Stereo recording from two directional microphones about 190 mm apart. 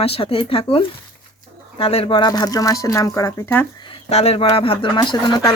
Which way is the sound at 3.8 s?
35° left (ahead or behind).